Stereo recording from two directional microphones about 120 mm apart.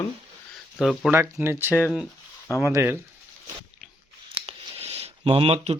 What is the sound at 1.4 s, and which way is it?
Speech, 15° right (ahead or behind).